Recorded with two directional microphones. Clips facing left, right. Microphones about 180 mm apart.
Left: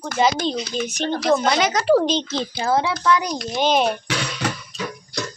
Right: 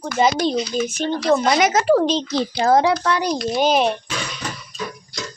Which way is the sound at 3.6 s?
Centre (ahead or behind).